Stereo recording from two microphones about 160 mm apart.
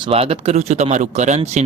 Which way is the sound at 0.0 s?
40° right (ahead or behind).